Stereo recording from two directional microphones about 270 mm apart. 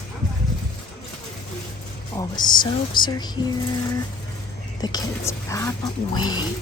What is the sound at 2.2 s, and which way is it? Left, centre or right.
Speech, centre.